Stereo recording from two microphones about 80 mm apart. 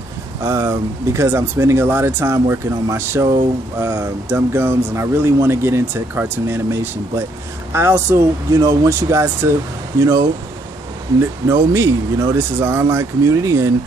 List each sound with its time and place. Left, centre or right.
0.4 s speech: right